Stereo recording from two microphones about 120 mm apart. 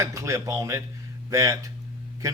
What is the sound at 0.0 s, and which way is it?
Speech, 25° right (ahead or behind).